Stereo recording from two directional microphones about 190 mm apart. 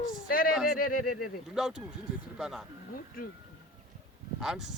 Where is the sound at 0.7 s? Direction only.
45° left (ahead or behind).